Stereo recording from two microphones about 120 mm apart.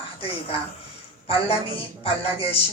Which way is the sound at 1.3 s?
50° left (ahead or behind).